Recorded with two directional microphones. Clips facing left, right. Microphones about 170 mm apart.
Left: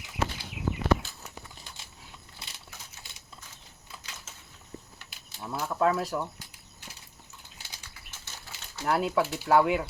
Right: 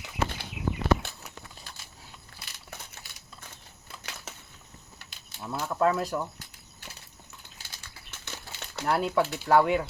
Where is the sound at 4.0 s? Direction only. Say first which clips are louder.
Right 8 dB; 65° right (ahead or behind).